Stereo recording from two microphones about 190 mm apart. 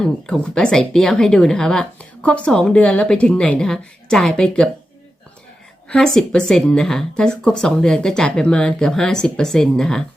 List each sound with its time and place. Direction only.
0.0 s a woman's voice: 5° left (ahead or behind)
5.9 s a woman's voice: 5° left (ahead or behind)